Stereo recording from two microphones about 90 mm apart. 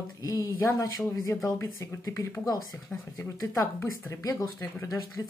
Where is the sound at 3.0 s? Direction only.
25° left (ahead or behind).